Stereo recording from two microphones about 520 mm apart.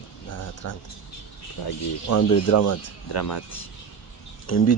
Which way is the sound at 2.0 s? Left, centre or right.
Left.